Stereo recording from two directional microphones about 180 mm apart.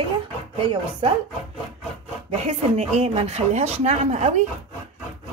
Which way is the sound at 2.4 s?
35° right (ahead or behind).